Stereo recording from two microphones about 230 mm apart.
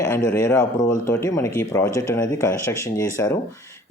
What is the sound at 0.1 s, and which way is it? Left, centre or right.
Speech, centre.